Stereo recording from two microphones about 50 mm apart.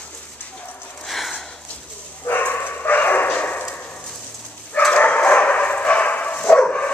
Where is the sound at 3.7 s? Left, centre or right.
Left.